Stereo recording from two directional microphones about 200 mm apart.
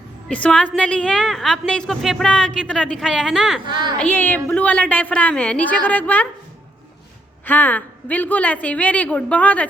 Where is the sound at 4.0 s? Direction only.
10° left (ahead or behind).